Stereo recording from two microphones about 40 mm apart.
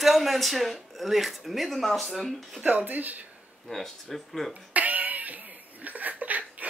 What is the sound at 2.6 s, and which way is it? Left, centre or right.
Speech, right.